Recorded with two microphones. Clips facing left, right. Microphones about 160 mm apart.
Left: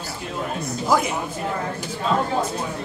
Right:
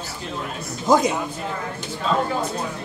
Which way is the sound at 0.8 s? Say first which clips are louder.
Right 4 dB; 20° right (ahead or behind).